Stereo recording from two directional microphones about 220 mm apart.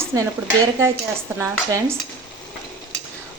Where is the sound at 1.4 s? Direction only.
10° right (ahead or behind).